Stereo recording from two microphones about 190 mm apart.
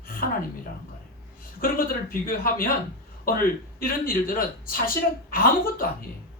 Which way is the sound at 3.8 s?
50° left (ahead or behind).